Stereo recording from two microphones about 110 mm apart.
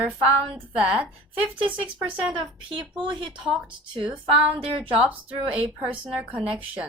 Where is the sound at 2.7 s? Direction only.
45° right (ahead or behind).